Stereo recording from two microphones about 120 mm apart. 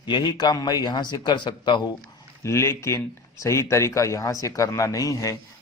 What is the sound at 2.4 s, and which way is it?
A man's voice, 20° left (ahead or behind).